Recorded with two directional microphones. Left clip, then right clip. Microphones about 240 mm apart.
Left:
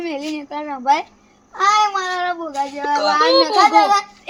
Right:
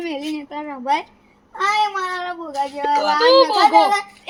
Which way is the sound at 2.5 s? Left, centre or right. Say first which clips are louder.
Even; centre.